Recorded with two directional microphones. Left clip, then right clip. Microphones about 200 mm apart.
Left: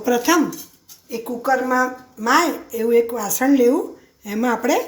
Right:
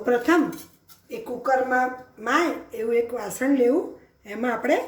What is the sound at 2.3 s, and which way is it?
Speech, 45° left (ahead or behind).